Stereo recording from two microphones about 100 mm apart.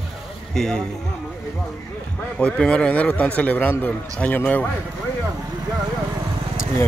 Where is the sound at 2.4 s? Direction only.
10° left (ahead or behind).